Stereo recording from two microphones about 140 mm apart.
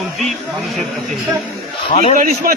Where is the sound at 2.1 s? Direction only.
90° right.